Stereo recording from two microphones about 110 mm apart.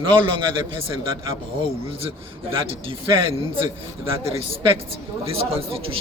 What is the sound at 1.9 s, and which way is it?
A man's voice, 60° right (ahead or behind).